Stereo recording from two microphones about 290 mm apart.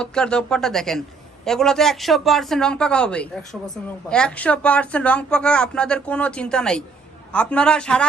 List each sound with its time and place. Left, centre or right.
0.0 s speech: centre